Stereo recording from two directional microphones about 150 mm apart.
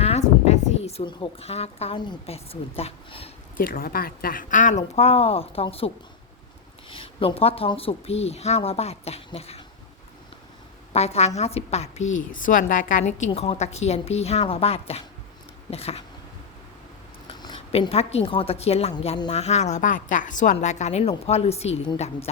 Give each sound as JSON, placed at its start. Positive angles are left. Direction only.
{"t": 0.0, "sound": "a sound", "side_deg": 45}
{"t": 2.2, "sound": "speech", "side_deg": 40}
{"t": 3.6, "sound": "speech", "side_deg": 70}
{"t": 4.8, "sound": "speech", "side_deg": 45}
{"t": 6.9, "sound": "a woman's voice", "side_deg": 40}
{"t": 10.9, "sound": "a woman's voice", "side_deg": 45}
{"t": 12.3, "sound": "a woman's voice", "side_deg": 65}
{"t": 17.2, "sound": "a woman's voice", "side_deg": 35}